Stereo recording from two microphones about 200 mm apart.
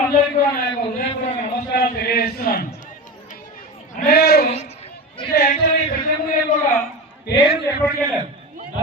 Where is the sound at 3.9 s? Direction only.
50° left (ahead or behind).